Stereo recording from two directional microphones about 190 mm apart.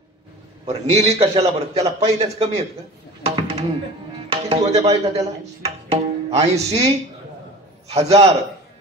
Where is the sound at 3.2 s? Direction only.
30° right (ahead or behind).